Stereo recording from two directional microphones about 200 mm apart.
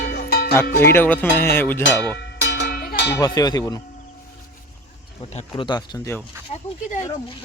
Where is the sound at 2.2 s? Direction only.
60° left (ahead or behind).